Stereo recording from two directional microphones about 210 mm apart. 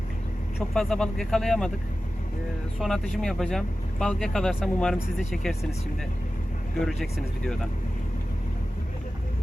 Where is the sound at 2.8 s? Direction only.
Centre (ahead or behind).